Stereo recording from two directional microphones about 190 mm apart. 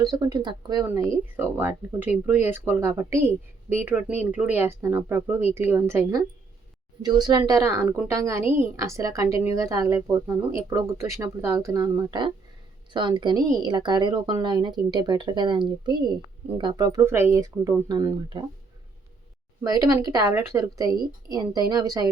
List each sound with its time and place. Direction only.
0.0 s a woman's voice: 20° right (ahead or behind)
19.6 s a woman's voice: 20° right (ahead or behind)